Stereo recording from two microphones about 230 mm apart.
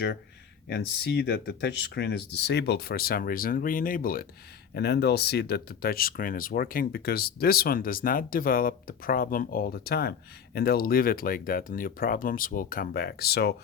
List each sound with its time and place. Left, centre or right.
0.7 s speech: left